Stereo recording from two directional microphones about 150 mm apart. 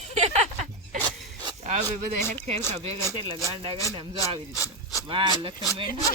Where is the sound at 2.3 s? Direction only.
50° right (ahead or behind).